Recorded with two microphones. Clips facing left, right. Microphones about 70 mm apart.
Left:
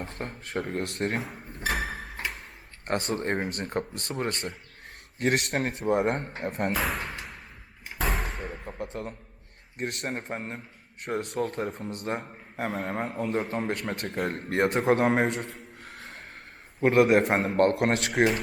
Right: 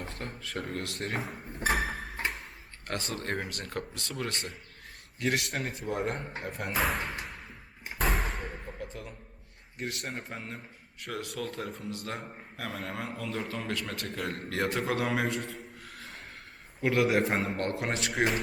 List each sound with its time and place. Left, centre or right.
0.0 s a man's voice: left
1.7 s a sound: centre
2.8 s a man's voice: left
5.2 s speech: left
6.7 s speech: centre
8.0 s slam: centre
8.9 s a man's voice: left
15.8 s music: left
16.8 s speech: left